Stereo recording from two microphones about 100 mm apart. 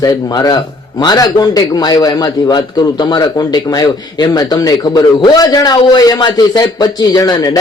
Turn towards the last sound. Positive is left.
turn(degrees=40)  # may be behind; listen again after turning